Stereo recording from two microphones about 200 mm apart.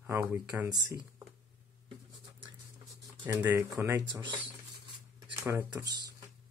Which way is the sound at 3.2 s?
15° right (ahead or behind).